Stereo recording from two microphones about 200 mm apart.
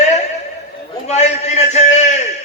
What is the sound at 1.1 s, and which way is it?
A man's voice, 35° left (ahead or behind).